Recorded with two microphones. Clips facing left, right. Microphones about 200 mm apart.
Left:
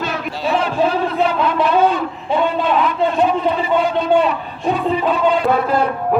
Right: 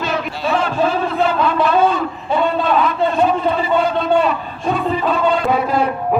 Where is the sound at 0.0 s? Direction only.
50° left (ahead or behind).